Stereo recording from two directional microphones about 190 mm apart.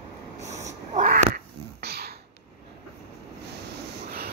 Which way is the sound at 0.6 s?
40° right (ahead or behind).